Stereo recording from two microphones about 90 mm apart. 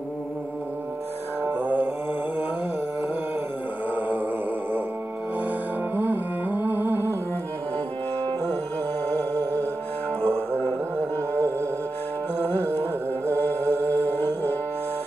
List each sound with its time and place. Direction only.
1.5 s mantra: 20° right (ahead or behind)
5.9 s music: 20° right (ahead or behind)
9.1 s music: 20° left (ahead or behind)
12.4 s carnatic music: 20° left (ahead or behind)
13.3 s music: 20° left (ahead or behind)